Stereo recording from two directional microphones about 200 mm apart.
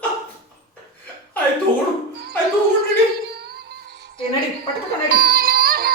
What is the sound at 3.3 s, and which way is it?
Music, 50° right (ahead or behind).